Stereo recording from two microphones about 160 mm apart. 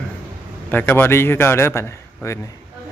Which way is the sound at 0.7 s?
10° left (ahead or behind).